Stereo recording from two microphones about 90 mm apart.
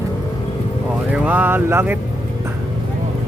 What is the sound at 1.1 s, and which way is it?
Speech, 20° right (ahead or behind).